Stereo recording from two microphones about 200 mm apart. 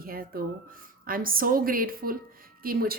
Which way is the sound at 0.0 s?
45° right (ahead or behind).